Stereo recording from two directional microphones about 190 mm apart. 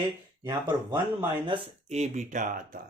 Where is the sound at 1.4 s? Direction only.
30° right (ahead or behind).